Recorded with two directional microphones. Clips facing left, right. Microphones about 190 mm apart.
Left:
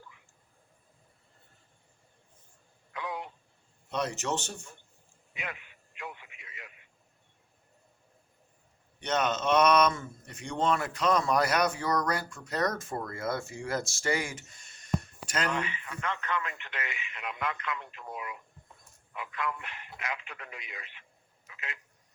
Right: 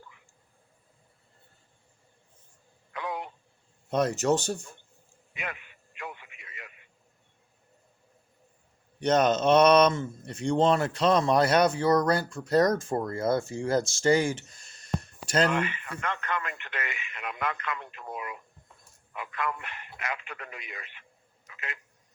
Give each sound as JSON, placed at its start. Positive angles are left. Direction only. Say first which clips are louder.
{"t": 2.9, "sound": "radio", "louder": "right 3 dB", "side_deg": -55}
{"t": 3.8, "sound": "speech", "louder": "right 7 dB", "side_deg": -45}
{"t": 5.3, "sound": "radio", "louder": "right 3 dB", "side_deg": -55}
{"t": 9.0, "sound": "a man's voice", "louder": "right 7 dB", "side_deg": -40}
{"t": 15.5, "sound": "speech", "louder": "right 4 dB", "side_deg": -55}
{"t": 21.5, "sound": "telephone", "louder": "right 3 dB", "side_deg": -55}